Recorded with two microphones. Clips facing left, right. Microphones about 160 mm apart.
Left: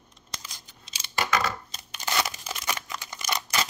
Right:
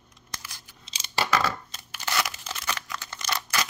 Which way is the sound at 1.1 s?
30° right (ahead or behind).